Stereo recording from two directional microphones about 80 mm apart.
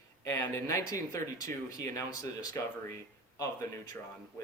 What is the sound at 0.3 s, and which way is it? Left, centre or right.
Speech, left.